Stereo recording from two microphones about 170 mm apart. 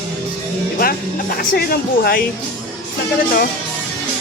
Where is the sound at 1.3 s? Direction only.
65° left (ahead or behind).